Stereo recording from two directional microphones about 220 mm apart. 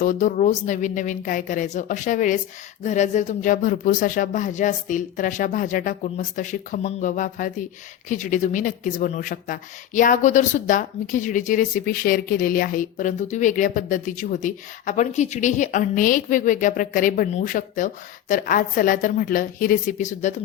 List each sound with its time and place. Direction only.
0.0 s speech: 35° left (ahead or behind)